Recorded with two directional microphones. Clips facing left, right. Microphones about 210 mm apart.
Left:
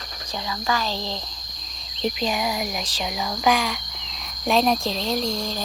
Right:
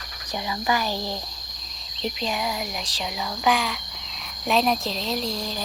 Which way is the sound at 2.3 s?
15° left (ahead or behind).